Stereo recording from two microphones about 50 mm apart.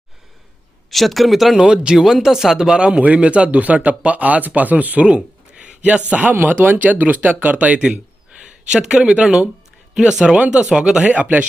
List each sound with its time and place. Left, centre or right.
0.9 s speech: centre
1.5 s speech: centre
11.0 s speech: right